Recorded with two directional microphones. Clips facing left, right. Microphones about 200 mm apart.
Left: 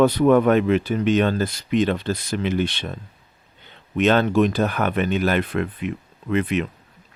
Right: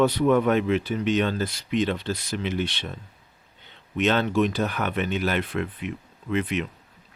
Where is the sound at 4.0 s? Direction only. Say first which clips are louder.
Left 5 dB; 50° left (ahead or behind).